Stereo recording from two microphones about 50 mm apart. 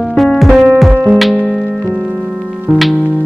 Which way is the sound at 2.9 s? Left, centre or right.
Right.